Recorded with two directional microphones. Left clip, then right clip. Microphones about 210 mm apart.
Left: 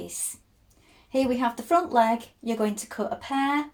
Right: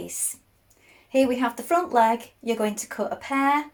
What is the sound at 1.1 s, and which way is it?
Speech, 15° right (ahead or behind).